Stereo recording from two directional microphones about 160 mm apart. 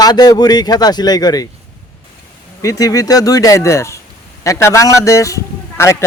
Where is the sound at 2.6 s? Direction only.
20° left (ahead or behind).